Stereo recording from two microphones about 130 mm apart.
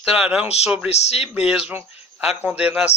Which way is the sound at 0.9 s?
55° left (ahead or behind).